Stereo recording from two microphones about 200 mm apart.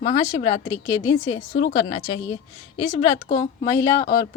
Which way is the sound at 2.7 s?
25° left (ahead or behind).